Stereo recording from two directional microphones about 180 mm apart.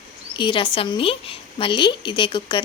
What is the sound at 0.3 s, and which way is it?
A woman's voice, 25° left (ahead or behind).